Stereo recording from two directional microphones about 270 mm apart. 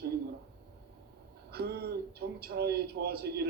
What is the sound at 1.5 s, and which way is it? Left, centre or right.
A man's voice, right.